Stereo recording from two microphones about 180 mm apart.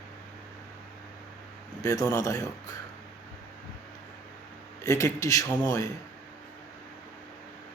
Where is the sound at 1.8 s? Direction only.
20° left (ahead or behind).